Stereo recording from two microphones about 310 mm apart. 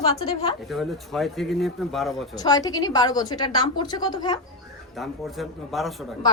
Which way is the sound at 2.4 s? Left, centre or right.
Centre.